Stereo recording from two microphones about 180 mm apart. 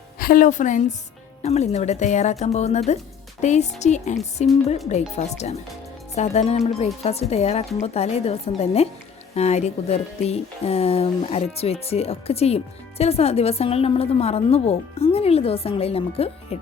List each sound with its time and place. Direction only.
0.2 s a woman's voice: 50° left (ahead or behind); by 16.6 s 35° left (ahead or behind)